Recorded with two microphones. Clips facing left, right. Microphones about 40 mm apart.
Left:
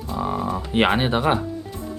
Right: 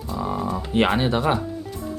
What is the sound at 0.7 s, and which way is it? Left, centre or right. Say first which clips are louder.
Speech: left 1 dB; left.